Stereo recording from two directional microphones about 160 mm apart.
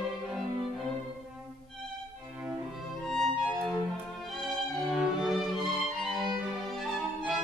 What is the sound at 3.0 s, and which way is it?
Music, 5° left (ahead or behind).